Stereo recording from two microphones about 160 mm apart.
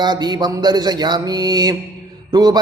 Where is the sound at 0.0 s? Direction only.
25° right (ahead or behind).